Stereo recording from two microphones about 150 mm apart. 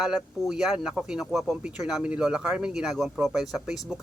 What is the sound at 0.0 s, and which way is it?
Speech, 5° right (ahead or behind).